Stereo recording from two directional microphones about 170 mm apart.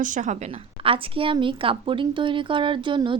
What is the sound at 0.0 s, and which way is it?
Speech, 50° right (ahead or behind).